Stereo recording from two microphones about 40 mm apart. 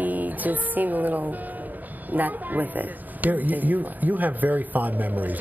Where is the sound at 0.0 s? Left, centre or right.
Right.